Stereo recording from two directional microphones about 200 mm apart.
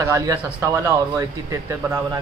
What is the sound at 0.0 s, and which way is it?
Speech, 15° right (ahead or behind).